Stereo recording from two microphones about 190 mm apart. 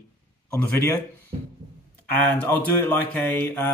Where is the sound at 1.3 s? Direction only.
30° right (ahead or behind).